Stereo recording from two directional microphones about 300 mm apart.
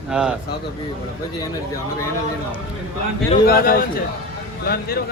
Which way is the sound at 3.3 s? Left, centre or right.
Left.